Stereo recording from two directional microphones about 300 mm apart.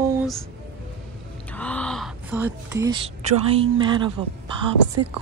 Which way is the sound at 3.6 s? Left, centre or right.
Centre.